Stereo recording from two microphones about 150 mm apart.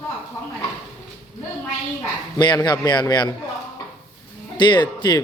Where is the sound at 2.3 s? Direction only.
25° left (ahead or behind).